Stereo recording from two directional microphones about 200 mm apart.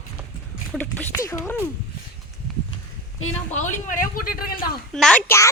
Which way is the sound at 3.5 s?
40° left (ahead or behind).